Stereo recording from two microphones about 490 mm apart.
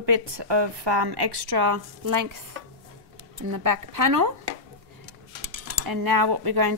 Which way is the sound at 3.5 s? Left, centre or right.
Right.